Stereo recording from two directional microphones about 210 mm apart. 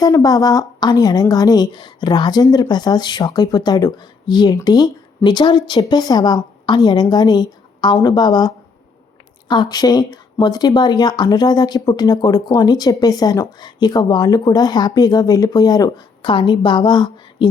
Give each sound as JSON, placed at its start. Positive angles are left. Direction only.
{"t": 0.0, "sound": "a woman's voice", "side_deg": 20}